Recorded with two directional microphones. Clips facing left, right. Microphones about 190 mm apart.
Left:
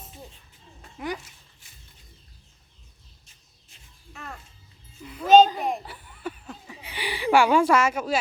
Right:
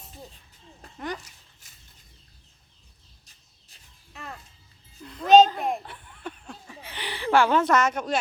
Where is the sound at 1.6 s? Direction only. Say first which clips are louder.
Left 2 dB; 40° right (ahead or behind).